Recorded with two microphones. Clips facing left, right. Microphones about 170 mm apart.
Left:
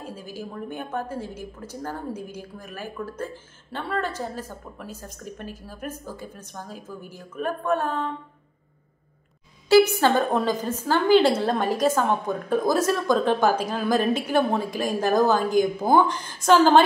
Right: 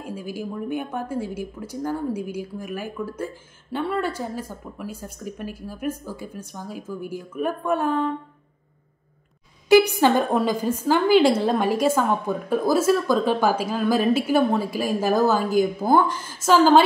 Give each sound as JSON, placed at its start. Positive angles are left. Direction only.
{"t": 0.0, "sound": "a woman's voice", "side_deg": -10}
{"t": 9.7, "sound": "a woman's voice", "side_deg": -15}